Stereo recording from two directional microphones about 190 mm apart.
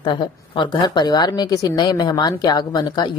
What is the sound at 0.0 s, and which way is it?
Speech, 25° left (ahead or behind).